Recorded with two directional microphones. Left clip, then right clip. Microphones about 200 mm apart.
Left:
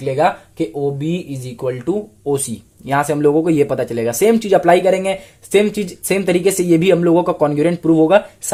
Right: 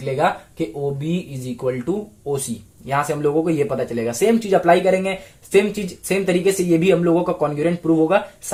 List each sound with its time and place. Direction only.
0.0 s speech: 45° left (ahead or behind)